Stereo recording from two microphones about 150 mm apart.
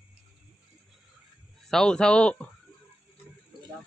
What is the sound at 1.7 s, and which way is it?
Speech, 5° left (ahead or behind).